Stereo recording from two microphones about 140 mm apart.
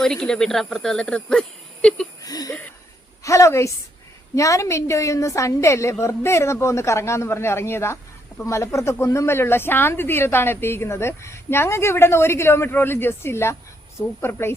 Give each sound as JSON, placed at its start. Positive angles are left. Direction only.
{"t": 0.0, "sound": "speech", "side_deg": 5}
{"t": 2.2, "sound": "a sound", "side_deg": 25}
{"t": 3.2, "sound": "a woman's voice", "side_deg": 20}